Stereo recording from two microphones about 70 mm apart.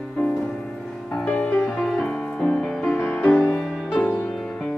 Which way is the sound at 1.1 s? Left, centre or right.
Centre.